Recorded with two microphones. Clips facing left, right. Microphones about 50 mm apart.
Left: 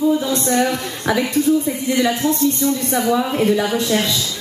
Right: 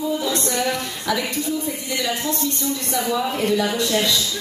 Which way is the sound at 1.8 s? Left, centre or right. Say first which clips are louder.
Left 7 dB; left.